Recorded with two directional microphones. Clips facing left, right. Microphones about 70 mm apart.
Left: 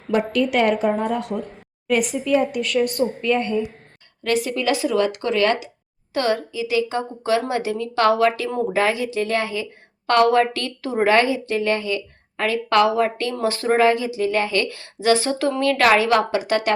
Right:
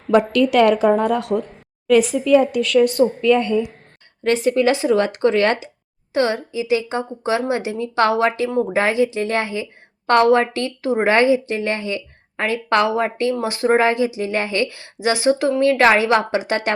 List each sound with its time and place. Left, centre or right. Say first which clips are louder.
0.1 s a woman's voice: right 5 dB; right
4.2 s speech: right 5 dB; right